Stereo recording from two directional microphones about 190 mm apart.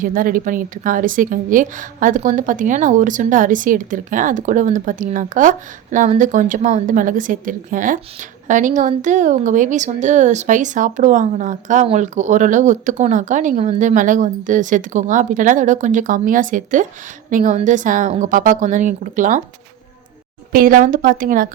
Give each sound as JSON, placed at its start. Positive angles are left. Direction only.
{"t": 0.0, "sound": "a woman's voice", "side_deg": -45}
{"t": 20.5, "sound": "a woman's voice", "side_deg": -50}